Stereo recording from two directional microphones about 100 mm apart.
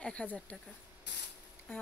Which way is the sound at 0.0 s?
10° left (ahead or behind).